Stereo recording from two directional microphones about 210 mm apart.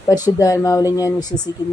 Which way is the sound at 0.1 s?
15° left (ahead or behind).